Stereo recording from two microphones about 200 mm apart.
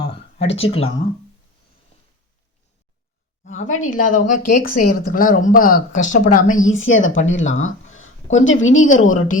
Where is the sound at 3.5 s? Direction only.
80° left.